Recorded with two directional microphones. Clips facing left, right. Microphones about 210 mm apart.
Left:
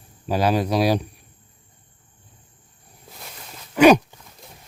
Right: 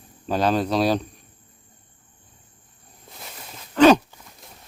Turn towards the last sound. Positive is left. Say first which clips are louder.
# even
turn(degrees=0)  # may be behind; listen again after turning